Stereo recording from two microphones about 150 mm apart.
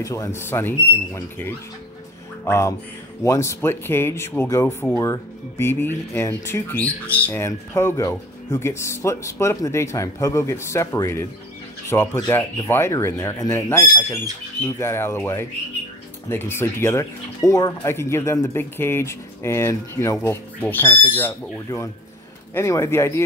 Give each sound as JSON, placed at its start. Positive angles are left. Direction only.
{"t": 0.0, "sound": "speech", "side_deg": 20}
{"t": 2.4, "sound": "mantra", "side_deg": 20}
{"t": 3.3, "sound": "speech", "side_deg": 20}